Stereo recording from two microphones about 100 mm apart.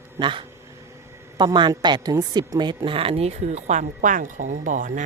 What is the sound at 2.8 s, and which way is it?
Speech, 70° right (ahead or behind).